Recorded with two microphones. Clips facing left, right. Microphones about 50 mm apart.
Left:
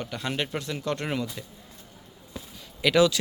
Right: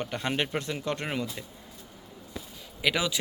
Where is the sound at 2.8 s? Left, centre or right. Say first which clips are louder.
Left 7 dB; centre.